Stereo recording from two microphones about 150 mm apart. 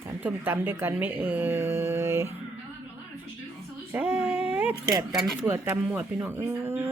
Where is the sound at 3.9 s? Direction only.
5° right (ahead or behind).